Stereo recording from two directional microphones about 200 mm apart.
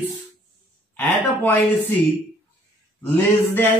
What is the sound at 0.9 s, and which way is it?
Speech, 10° left (ahead or behind).